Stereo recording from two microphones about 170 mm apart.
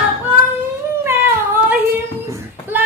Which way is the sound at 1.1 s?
15° right (ahead or behind).